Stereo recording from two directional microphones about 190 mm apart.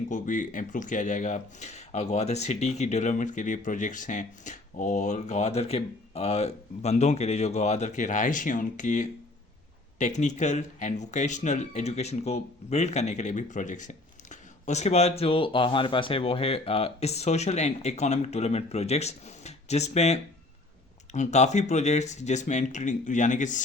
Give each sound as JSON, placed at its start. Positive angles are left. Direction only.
{"t": 0.1, "sound": "speech", "side_deg": 45}